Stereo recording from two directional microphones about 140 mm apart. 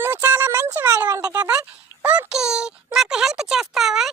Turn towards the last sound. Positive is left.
turn(degrees=0)  # may be behind; listen again after turning